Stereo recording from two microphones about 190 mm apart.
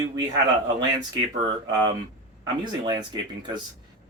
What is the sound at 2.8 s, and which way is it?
Speech, 20° right (ahead or behind).